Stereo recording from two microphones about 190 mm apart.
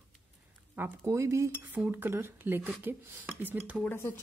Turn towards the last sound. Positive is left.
turn(degrees=10)  # may be behind; listen again after turning